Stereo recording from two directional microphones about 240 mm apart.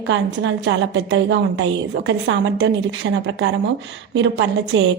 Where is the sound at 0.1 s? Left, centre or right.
Right.